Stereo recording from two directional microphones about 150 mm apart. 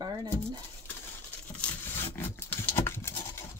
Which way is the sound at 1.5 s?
10° left (ahead or behind).